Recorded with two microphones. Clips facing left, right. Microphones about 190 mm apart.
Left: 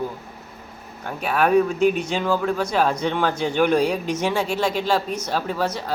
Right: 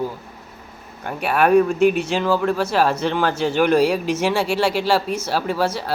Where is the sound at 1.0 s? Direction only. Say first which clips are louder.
Right 3 dB; 5° right (ahead or behind).